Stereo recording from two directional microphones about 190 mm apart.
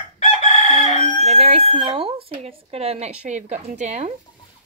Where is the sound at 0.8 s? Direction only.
35° right (ahead or behind).